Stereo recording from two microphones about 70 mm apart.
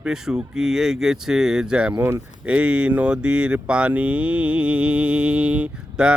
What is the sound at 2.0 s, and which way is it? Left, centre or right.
Speech, right.